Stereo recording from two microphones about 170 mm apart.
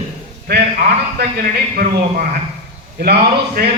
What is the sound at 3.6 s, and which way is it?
Speech, 60° right (ahead or behind).